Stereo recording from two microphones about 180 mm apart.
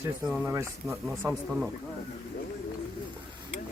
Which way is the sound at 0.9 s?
15° right (ahead or behind).